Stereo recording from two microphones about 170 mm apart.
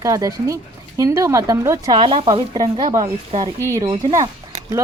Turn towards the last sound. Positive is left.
turn(degrees=-25)  # may be behind; listen again after turning